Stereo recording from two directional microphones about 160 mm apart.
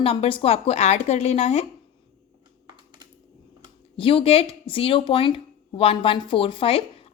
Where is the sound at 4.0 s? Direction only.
35° left (ahead or behind).